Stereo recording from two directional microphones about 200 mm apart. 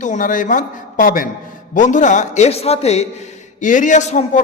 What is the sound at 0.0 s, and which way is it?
A man's voice, 40° left (ahead or behind).